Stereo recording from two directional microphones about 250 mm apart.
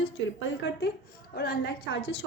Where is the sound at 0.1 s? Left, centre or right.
Left.